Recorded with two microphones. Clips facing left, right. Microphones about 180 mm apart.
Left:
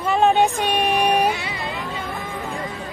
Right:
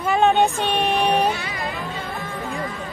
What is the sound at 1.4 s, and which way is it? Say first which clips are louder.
Insect: even; 20° left (ahead or behind).